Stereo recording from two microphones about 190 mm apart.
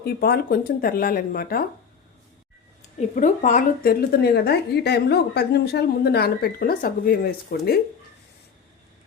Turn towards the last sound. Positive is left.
turn(degrees=55)  # may be behind; listen again after turning